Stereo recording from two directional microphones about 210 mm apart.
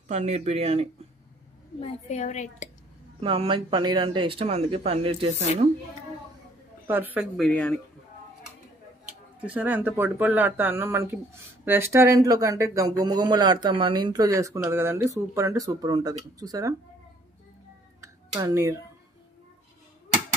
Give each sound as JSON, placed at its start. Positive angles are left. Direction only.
{"t": 0.1, "sound": "speech", "side_deg": -35}
{"t": 1.8, "sound": "a woman's voice", "side_deg": 35}
{"t": 3.2, "sound": "speech", "side_deg": -25}
{"t": 6.9, "sound": "speech", "side_deg": -10}
{"t": 7.3, "sound": "speech", "side_deg": 5}
{"t": 9.4, "sound": "speech", "side_deg": -5}
{"t": 18.0, "sound": "a sound", "side_deg": -15}